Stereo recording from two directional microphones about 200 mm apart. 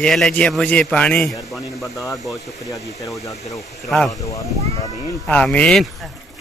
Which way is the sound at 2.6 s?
15° left (ahead or behind).